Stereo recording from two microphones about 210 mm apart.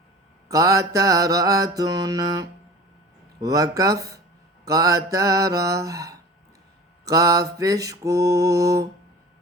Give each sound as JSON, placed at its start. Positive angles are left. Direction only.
{"t": 0.4, "sound": "mantra", "side_deg": -15}